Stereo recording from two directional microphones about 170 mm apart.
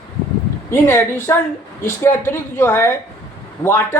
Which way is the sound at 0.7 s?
15° left (ahead or behind).